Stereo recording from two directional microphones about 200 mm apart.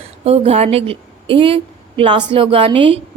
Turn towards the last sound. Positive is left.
turn(degrees=-25)  # may be behind; listen again after turning